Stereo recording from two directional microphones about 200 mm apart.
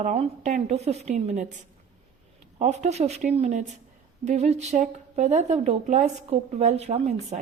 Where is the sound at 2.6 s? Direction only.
35° right (ahead or behind).